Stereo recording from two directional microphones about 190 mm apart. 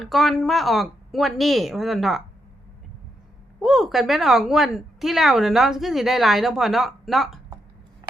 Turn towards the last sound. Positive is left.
turn(degrees=0)  # may be behind; listen again after turning